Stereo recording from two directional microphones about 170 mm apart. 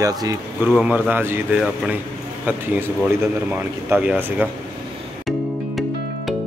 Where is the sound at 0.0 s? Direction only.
20° right (ahead or behind).